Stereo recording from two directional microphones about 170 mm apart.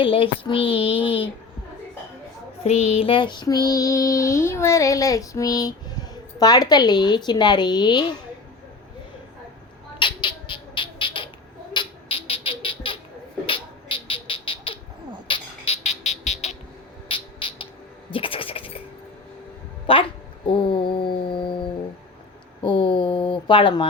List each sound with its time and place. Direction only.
0.0 s a child's voice: 30° left (ahead or behind)
2.6 s child singing: 35° left (ahead or behind)
10.0 s squawk: 30° left (ahead or behind)
11.7 s a sound: 30° left (ahead or behind)
15.3 s music: 35° left (ahead or behind)
17.1 s music: 30° left (ahead or behind)
18.1 s scratch: 30° left (ahead or behind)
19.9 s a sound: 30° left (ahead or behind)